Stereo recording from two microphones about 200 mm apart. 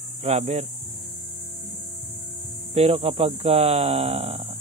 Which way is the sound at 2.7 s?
30° right (ahead or behind).